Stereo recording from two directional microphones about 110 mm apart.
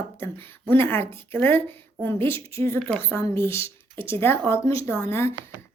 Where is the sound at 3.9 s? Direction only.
55° right (ahead or behind).